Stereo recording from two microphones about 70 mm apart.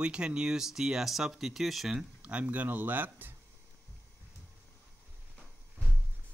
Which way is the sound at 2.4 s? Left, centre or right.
Right.